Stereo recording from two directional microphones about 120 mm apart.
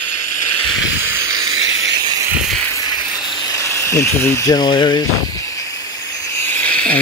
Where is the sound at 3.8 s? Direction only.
25° left (ahead or behind).